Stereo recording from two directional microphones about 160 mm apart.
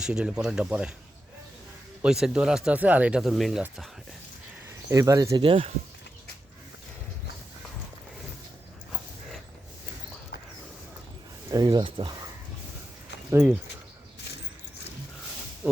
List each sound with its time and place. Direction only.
0.0 s speech: 5° right (ahead or behind)
2.0 s speech: 5° right (ahead or behind)
4.9 s speech: 20° right (ahead or behind)
5.4 s speech: 35° right (ahead or behind)
11.5 s speech: 25° right (ahead or behind)
13.3 s speech: 15° right (ahead or behind)
15.6 s speech: 10° right (ahead or behind)